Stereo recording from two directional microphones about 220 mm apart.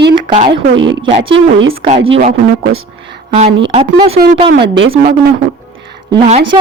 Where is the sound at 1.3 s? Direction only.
55° right (ahead or behind).